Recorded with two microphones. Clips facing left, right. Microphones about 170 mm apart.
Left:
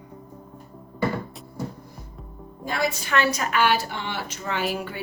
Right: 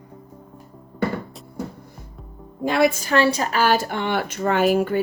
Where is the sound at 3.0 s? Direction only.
35° right (ahead or behind).